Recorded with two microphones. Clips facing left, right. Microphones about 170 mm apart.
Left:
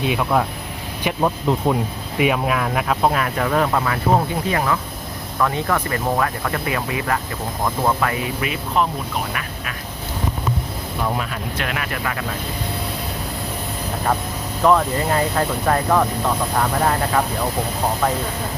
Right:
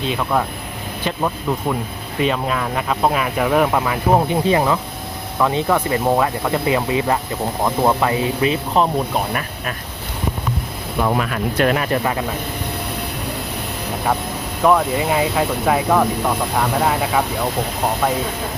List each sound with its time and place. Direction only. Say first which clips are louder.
0.0 s speech: left 1 dB; 10° left (ahead or behind)
1.0 s speech: left 2 dB; 15° left (ahead or behind); by 8.9 s 30° right (ahead or behind)
11.0 s speech: right 5 dB; 70° right (ahead or behind)
11.5 s speech: right 11 dB; 40° right (ahead or behind)
14.6 s speech: right 1 dB; 10° right (ahead or behind)